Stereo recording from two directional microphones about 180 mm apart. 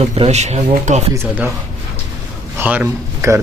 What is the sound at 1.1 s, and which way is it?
Speech, 15° right (ahead or behind).